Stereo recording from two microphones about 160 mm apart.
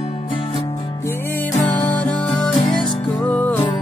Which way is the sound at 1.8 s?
10° left (ahead or behind).